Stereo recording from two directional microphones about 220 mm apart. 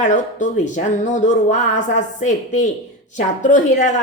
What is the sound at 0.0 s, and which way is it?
A woman's voice, 35° left (ahead or behind).